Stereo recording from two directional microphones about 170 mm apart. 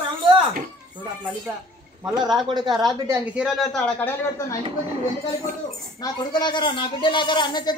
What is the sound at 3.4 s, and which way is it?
A man's voice, centre (ahead or behind).